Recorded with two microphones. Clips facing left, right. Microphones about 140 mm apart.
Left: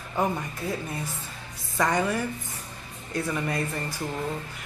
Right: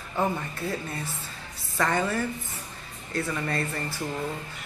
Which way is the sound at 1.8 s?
15° left (ahead or behind).